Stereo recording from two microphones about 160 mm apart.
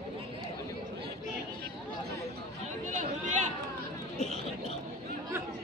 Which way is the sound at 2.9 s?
50° right (ahead or behind).